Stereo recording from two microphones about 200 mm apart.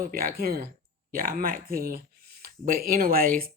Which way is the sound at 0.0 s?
45° right (ahead or behind).